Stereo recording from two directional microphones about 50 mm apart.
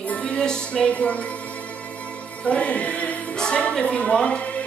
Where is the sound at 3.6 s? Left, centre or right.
Left.